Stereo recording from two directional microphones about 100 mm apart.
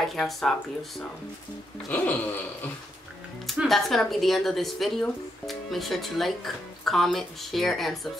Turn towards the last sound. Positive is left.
turn(degrees=0)  # may be behind; listen again after turning